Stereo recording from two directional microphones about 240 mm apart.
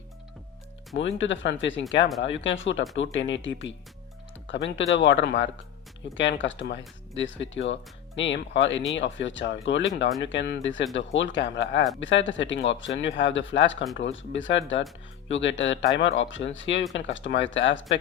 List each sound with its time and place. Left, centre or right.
0.9 s speech: left